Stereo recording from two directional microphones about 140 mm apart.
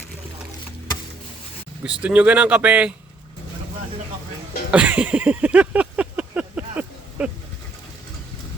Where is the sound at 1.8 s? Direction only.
10° right (ahead or behind).